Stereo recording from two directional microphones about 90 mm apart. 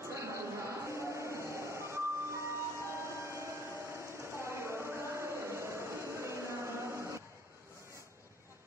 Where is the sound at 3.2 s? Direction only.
30° right (ahead or behind).